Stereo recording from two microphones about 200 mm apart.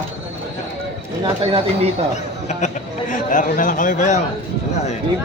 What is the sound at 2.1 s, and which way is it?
Speech, 35° left (ahead or behind).